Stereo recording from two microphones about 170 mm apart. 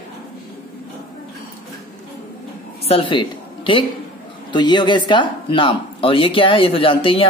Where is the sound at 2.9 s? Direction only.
30° left (ahead or behind).